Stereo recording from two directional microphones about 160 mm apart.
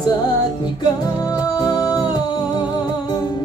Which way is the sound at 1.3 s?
25° left (ahead or behind).